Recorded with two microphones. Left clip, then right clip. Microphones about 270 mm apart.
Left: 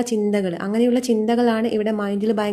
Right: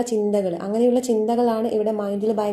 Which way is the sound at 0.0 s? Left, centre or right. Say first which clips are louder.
Even; left.